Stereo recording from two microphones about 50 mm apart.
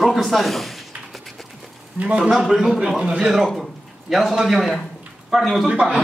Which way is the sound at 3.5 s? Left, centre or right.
Centre.